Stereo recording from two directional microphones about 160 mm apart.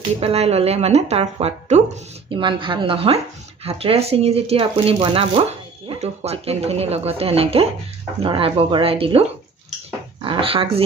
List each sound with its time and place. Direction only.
0.2 s speech: 40° right (ahead or behind)
2.3 s speech: 30° right (ahead or behind)